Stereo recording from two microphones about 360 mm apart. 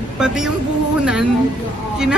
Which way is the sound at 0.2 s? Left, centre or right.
Centre.